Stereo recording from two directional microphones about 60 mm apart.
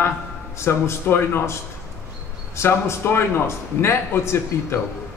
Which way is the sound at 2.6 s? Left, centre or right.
Left.